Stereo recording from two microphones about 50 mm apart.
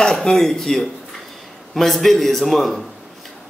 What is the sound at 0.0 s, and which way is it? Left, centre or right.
A man's voice, centre.